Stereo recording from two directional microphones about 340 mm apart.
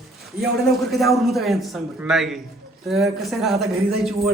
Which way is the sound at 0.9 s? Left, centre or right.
Centre.